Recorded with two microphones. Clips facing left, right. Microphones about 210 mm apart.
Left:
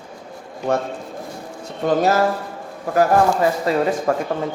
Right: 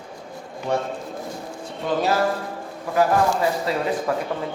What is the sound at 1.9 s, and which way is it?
Speech, 45° left (ahead or behind).